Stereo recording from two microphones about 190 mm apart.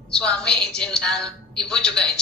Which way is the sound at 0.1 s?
5° left (ahead or behind).